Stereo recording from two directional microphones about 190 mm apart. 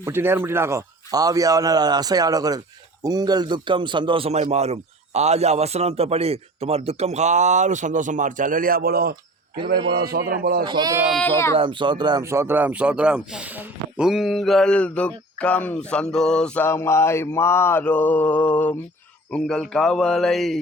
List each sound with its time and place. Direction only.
0.0 s a man's voice: 10° right (ahead or behind); by 10.6 s 50° right (ahead or behind)
10.6 s speech: 25° right (ahead or behind); by 16.0 s 5° left (ahead or behind)
16.1 s mantra: 5° left (ahead or behind)
19.3 s speech: centre (ahead or behind)